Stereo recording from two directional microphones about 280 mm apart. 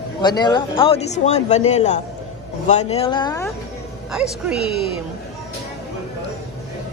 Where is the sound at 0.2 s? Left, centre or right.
Centre.